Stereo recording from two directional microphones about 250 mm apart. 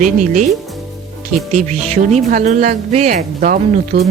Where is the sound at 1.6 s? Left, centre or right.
Right.